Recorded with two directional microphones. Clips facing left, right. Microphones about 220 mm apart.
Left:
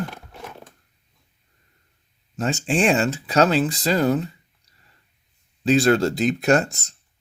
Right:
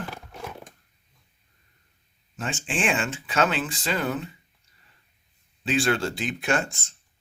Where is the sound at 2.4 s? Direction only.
40° left (ahead or behind).